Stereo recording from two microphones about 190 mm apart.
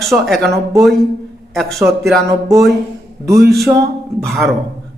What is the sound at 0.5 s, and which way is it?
Speech, 15° right (ahead or behind).